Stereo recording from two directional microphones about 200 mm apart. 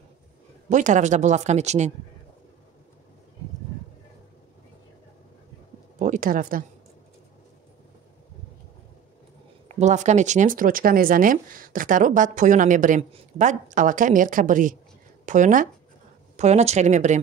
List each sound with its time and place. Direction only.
0.7 s speech: 40° right (ahead or behind)
5.9 s speech: 40° right (ahead or behind)
9.8 s speech: 35° right (ahead or behind)